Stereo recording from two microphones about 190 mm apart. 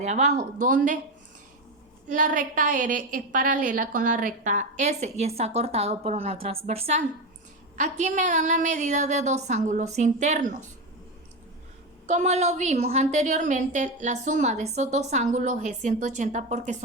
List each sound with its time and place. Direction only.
0.0 s a woman's voice: 40° right (ahead or behind)
2.1 s a woman's voice: 45° right (ahead or behind)
12.0 s a woman's voice: 35° right (ahead or behind)